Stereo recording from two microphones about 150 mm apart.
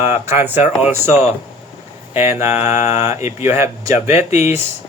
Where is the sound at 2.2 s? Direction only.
15° right (ahead or behind).